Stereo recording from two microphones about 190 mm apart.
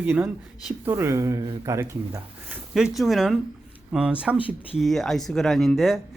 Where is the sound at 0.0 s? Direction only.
10° right (ahead or behind).